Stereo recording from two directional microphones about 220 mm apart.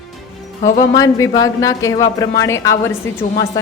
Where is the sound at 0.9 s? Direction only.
15° left (ahead or behind).